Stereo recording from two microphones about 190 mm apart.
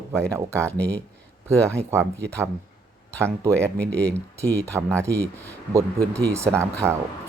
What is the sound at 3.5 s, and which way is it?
Speech, 5° left (ahead or behind).